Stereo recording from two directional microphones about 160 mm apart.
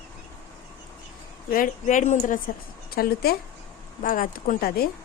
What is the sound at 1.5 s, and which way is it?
A woman's voice, 55° left (ahead or behind).